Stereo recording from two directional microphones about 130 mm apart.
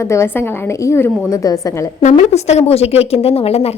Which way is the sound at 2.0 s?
65° left (ahead or behind).